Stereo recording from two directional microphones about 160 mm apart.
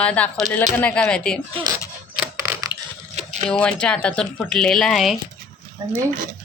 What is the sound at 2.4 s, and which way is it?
Mechanisms, 20° right (ahead or behind).